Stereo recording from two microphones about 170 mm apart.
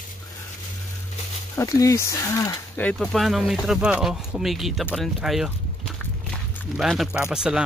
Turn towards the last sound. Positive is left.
turn(degrees=-5)  # may be behind; listen again after turning